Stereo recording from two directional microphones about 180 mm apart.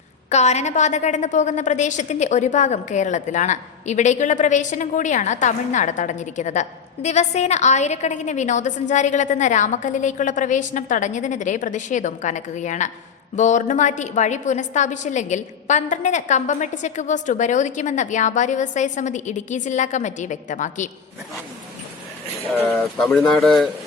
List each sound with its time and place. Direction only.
0.3 s a woman's voice: 40° left (ahead or behind)
22.5 s speech: 10° left (ahead or behind)